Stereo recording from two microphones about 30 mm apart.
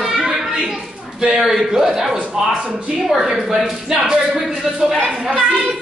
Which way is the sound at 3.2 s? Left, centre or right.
Centre.